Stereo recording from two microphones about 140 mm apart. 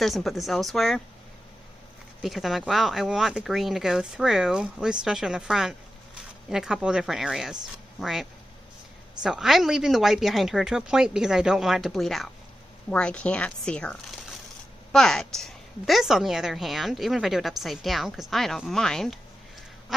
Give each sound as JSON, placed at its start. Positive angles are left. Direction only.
{"t": 0.0, "sound": "speech", "side_deg": 0}
{"t": 2.2, "sound": "a woman's voice", "side_deg": 0}